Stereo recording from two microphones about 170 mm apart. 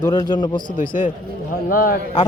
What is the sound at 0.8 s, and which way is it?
A man's voice, 50° left (ahead or behind).